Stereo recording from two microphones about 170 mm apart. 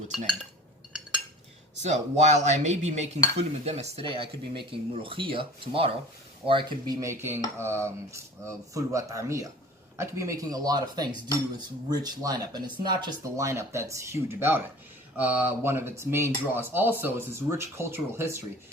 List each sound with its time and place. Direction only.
1.8 s cutlery: 40° right (ahead or behind)
6.4 s speech: 30° right (ahead or behind)
7.0 s speech: 15° right (ahead or behind)